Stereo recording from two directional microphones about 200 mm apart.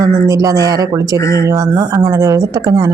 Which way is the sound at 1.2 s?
15° left (ahead or behind).